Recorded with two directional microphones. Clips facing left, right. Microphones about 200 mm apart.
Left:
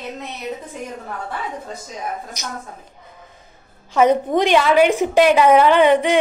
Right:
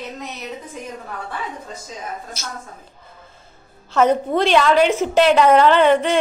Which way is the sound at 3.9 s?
15° left (ahead or behind).